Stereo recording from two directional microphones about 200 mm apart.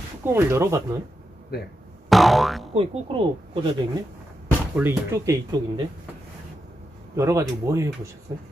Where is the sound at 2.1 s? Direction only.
Centre (ahead or behind).